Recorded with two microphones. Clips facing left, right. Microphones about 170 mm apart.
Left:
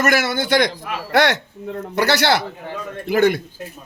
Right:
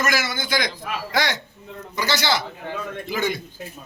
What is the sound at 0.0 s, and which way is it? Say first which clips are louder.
Speech: left 6 dB; 60° left (ahead or behind).